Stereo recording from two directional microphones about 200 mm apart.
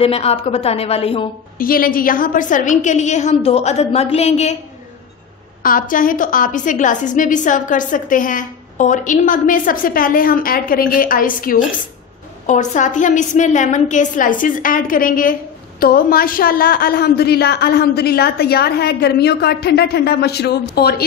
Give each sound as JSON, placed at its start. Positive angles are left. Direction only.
{"t": 0.0, "sound": "a woman's voice", "side_deg": 30}
{"t": 1.6, "sound": "a woman's voice", "side_deg": 45}
{"t": 5.6, "sound": "a woman's voice", "side_deg": 45}